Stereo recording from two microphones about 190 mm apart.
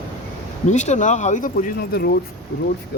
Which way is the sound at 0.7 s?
40° left (ahead or behind).